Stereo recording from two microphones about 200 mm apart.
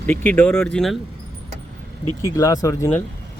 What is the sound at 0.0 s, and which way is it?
Speech, 5° left (ahead or behind).